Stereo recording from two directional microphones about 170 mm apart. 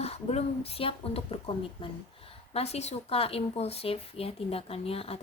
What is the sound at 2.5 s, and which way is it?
A woman's voice, 35° left (ahead or behind).